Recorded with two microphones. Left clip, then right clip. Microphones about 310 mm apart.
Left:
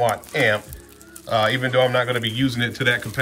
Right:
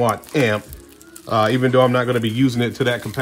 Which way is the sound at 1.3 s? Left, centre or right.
Centre.